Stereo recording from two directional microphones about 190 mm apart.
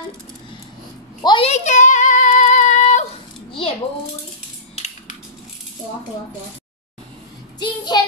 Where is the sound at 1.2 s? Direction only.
25° left (ahead or behind).